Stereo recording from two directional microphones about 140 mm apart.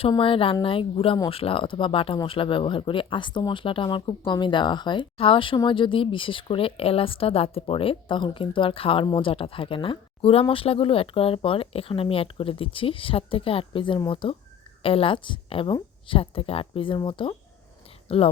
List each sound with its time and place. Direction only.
0.2 s speech: 40° left (ahead or behind)